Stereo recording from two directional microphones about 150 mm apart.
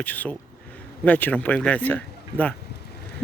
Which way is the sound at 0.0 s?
10° left (ahead or behind).